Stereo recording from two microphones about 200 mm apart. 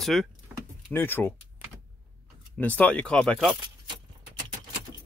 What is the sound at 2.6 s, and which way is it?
Speech, 10° left (ahead or behind).